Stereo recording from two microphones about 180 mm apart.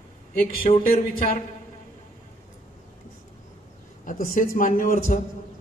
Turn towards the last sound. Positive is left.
turn(degrees=50)  # may be behind; listen again after turning